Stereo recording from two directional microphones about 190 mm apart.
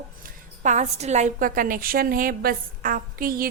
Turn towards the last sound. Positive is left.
turn(degrees=-50)  # may be behind; listen again after turning